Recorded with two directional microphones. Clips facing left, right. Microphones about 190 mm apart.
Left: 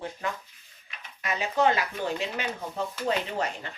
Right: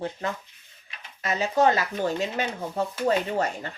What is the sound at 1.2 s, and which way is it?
Speech, 40° right (ahead or behind).